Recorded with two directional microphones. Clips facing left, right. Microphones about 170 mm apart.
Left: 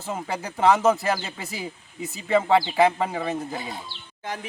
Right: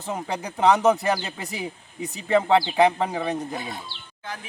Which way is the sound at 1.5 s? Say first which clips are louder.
Right 2 dB; 20° right (ahead or behind).